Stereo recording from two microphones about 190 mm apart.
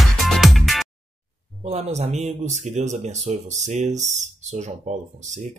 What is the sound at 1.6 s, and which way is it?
Speech, 35° right (ahead or behind).